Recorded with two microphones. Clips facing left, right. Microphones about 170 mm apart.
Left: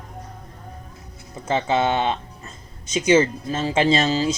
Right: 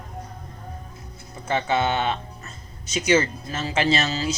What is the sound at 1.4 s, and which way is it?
Speech, 25° left (ahead or behind).